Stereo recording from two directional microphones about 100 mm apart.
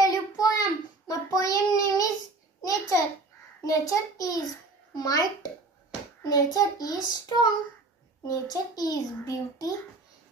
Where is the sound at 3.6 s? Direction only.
35° left (ahead or behind).